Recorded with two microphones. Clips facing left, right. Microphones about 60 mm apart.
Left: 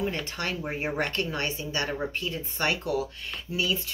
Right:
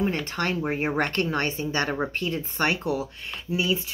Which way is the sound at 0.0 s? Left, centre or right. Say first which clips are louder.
Right 4 dB; right.